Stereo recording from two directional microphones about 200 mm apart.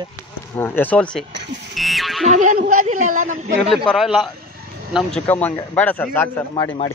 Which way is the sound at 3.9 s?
Centre (ahead or behind).